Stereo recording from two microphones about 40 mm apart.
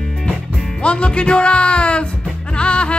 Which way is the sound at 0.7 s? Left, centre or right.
Left.